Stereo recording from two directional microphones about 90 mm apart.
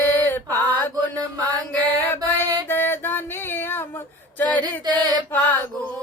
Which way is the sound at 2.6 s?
25° left (ahead or behind).